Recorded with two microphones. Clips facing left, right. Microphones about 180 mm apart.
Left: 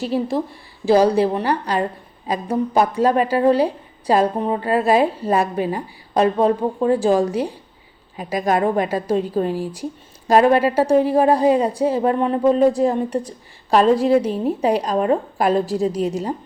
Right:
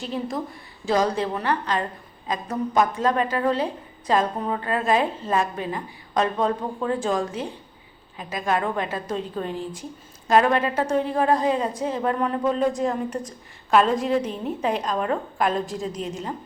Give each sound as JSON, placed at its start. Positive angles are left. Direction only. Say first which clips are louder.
{"t": 0.9, "sound": "a woman's voice", "louder": "left 8 dB", "side_deg": 30}